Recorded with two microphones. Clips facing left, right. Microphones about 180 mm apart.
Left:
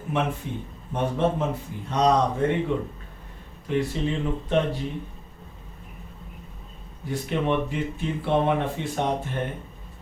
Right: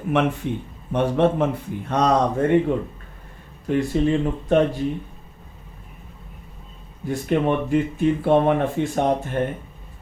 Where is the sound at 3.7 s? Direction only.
50° right (ahead or behind).